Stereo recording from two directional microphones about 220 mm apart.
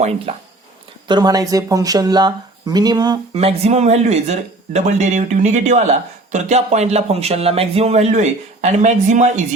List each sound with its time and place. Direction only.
0.0 s speech: 30° right (ahead or behind)
1.0 s speech: 20° right (ahead or behind)